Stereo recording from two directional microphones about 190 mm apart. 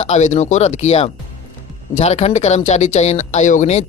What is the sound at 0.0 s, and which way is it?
Speech, 35° left (ahead or behind).